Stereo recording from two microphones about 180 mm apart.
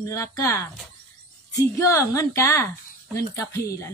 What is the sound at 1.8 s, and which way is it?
Speech, 15° left (ahead or behind).